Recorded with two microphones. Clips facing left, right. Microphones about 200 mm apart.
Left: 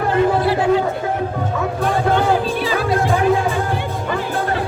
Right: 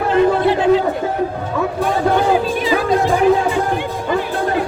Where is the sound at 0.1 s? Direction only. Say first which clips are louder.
Right 3 dB; 20° right (ahead or behind).